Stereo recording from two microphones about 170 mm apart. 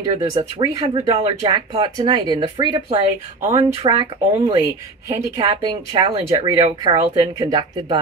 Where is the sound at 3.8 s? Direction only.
20° right (ahead or behind).